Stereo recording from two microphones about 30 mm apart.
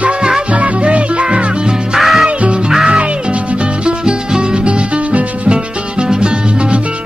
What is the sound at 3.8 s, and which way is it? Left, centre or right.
Music, right.